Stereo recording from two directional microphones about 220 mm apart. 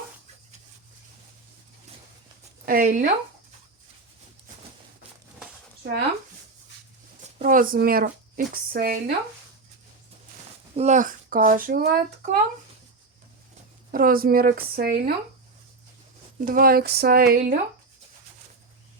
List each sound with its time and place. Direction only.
2.6 s speech: 40° right (ahead or behind)
7.3 s speech: 40° right (ahead or behind)
10.8 s speech: 35° right (ahead or behind)
13.9 s speech: 40° right (ahead or behind)
16.4 s speech: 40° right (ahead or behind)